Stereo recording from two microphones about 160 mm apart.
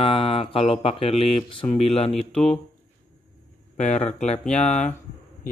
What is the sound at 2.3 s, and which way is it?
Speech, 5° left (ahead or behind).